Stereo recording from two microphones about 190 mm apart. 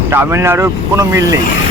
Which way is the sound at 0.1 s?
10° right (ahead or behind).